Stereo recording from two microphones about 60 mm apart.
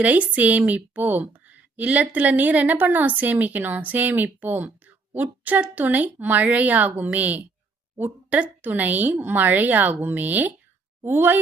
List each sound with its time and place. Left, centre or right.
0.0 s a woman's voice: right